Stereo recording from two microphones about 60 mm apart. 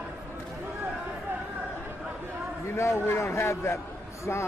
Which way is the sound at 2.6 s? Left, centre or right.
Left.